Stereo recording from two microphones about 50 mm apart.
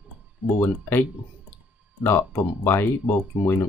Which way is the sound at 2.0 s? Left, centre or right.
Left.